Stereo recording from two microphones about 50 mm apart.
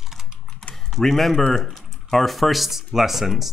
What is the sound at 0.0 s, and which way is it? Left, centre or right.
Typing, centre.